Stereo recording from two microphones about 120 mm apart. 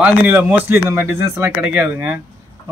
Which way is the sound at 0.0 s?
15° right (ahead or behind).